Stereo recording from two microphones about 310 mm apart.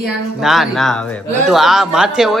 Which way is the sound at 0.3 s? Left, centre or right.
Centre.